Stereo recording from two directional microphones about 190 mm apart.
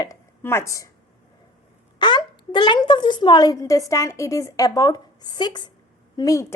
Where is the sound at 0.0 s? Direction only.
15° left (ahead or behind).